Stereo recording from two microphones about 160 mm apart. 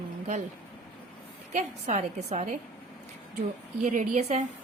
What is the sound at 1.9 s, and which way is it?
Speech, 40° right (ahead or behind).